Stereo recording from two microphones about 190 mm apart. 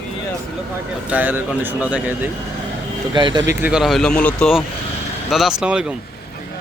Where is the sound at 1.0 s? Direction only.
10° right (ahead or behind).